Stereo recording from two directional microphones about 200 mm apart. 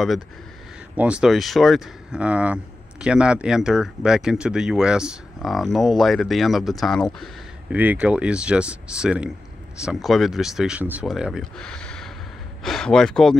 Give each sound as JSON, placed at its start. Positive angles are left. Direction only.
{"t": 0.9, "sound": "speech", "side_deg": -5}